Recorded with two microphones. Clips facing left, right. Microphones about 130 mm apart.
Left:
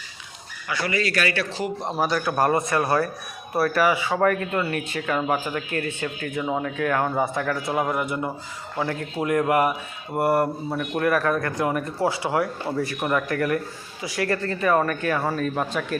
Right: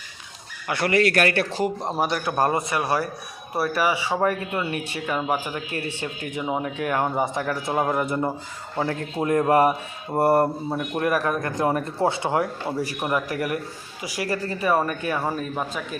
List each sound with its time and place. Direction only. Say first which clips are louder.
0.7 s a man's voice: right 5 dB; 60° right (ahead or behind)
2.0 s speech: left 1 dB; 25° right (ahead or behind)
5.5 s speech: left 2 dB; 30° right (ahead or behind)
13.0 s speech: left 2 dB; 10° right (ahead or behind)
15.5 s speech: left 3 dB; centre (ahead or behind)